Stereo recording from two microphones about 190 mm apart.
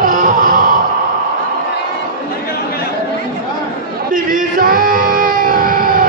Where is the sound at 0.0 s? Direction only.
45° right (ahead or behind).